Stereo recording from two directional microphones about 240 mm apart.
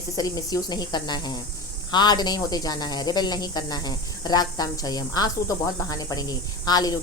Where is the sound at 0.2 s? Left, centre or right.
Centre.